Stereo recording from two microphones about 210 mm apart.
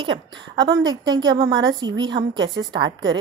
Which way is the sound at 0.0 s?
20° right (ahead or behind).